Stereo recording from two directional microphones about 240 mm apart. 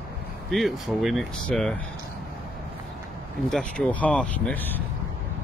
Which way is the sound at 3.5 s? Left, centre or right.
Centre.